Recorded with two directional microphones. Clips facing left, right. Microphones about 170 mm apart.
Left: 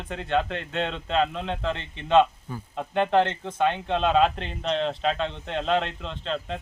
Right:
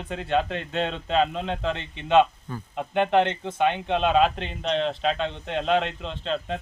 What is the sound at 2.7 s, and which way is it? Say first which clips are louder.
Speech: right 1 dB; 15° right (ahead or behind).